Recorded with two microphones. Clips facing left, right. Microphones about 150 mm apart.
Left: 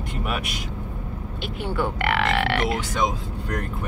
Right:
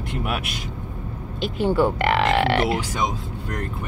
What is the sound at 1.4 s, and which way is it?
Speech, 35° right (ahead or behind).